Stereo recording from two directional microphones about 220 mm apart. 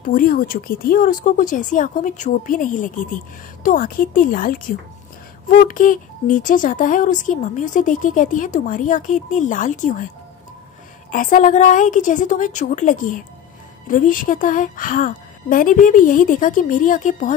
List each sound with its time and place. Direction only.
0.0 s speech: 40° left (ahead or behind)
11.1 s speech: 40° left (ahead or behind)